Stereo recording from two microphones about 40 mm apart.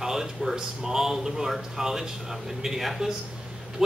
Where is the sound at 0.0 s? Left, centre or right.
Centre.